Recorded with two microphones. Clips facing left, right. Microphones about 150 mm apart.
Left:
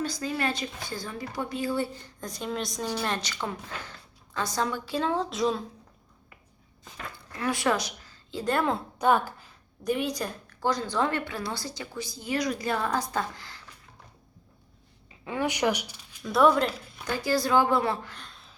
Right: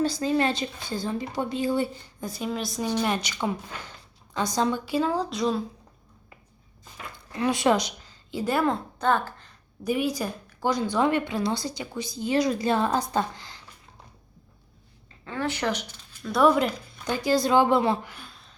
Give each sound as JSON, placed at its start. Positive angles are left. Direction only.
{"t": 0.0, "sound": "a woman's voice", "side_deg": -30}
{"t": 2.2, "sound": "a woman's voice", "side_deg": -5}
{"t": 4.9, "sound": "speech", "side_deg": -5}
{"t": 7.3, "sound": "speech", "side_deg": -20}
{"t": 9.0, "sound": "a sound", "side_deg": 10}
{"t": 9.8, "sound": "a woman's voice", "side_deg": -5}
{"t": 15.2, "sound": "speech", "side_deg": 15}
{"t": 16.2, "sound": "a woman's voice", "side_deg": 0}